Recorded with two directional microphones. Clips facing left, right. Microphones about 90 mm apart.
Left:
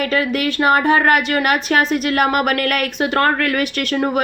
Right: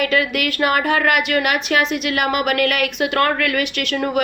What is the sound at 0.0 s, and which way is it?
A woman's voice, 35° left (ahead or behind).